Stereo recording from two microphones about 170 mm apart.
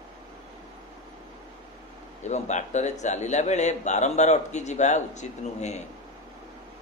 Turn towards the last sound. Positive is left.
turn(degrees=40)  # may be behind; listen again after turning